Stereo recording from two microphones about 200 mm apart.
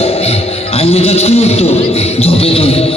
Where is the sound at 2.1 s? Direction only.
30° left (ahead or behind).